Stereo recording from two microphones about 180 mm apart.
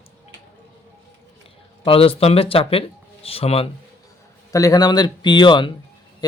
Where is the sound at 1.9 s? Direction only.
30° left (ahead or behind).